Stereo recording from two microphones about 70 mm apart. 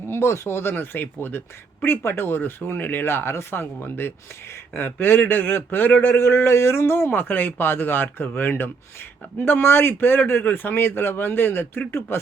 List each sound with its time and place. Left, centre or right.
0.1 s a man's voice: left